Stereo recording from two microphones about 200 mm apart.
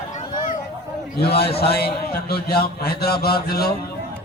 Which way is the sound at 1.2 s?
55° left (ahead or behind).